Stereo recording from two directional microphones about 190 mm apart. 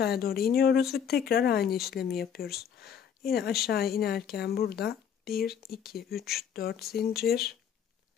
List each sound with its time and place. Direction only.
0.0 s speech: 55° left (ahead or behind)